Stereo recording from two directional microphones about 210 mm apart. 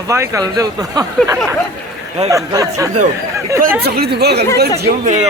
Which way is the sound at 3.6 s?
45° right (ahead or behind).